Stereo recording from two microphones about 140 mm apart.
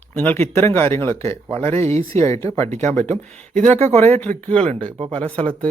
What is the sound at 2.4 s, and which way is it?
Speech, 50° right (ahead or behind).